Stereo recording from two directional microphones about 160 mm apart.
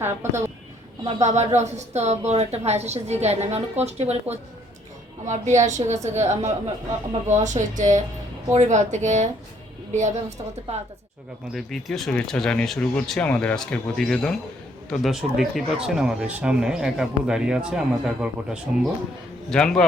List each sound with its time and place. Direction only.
0.0 s speech: 15° right (ahead or behind)
1.0 s a woman's voice: 45° right (ahead or behind)
11.5 s speech: centre (ahead or behind)